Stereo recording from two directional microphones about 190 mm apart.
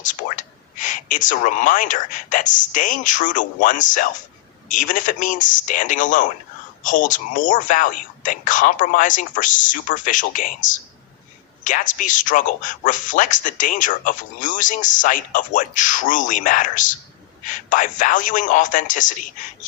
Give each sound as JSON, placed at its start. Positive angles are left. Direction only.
{"t": 0.0, "sound": "speech", "side_deg": 40}